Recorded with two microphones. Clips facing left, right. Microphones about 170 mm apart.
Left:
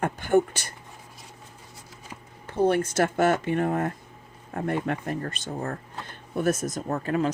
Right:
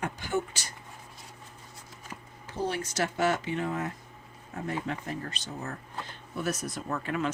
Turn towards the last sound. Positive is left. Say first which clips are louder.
# left 5 dB
turn(degrees=35)  # may be behind; listen again after turning